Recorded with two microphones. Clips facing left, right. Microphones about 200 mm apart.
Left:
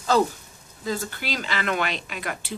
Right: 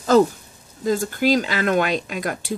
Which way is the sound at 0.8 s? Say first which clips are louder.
Right 10 dB; 45° right (ahead or behind).